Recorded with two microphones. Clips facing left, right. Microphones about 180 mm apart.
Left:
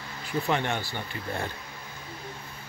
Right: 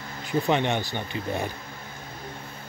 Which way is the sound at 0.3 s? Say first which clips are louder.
Right 4 dB; 20° right (ahead or behind).